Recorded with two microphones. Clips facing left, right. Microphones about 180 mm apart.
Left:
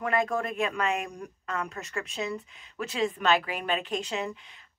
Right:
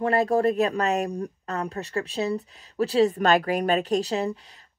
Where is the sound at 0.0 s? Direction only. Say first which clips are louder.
Right 7 dB; 35° right (ahead or behind).